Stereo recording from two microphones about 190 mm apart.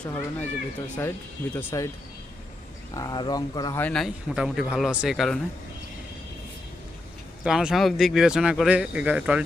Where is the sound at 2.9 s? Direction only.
20° left (ahead or behind).